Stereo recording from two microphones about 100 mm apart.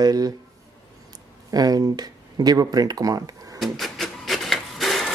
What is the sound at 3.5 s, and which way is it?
Printer, centre (ahead or behind).